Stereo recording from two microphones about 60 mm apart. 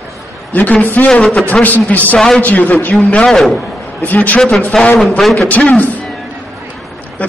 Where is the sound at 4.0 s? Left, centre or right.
Left.